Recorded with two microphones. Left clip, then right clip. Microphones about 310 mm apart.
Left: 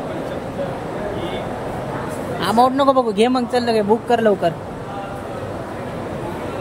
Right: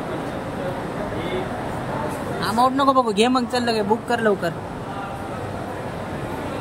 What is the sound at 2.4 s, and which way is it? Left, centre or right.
A man's voice, centre.